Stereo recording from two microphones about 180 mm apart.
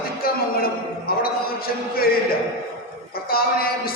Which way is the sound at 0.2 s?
55° left (ahead or behind).